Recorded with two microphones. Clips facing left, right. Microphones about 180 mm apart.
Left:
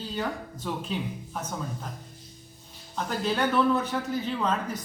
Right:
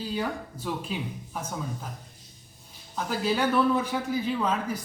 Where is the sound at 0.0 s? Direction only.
10° right (ahead or behind).